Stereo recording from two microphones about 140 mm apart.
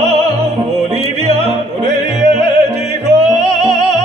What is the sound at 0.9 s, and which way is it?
Music, 50° right (ahead or behind).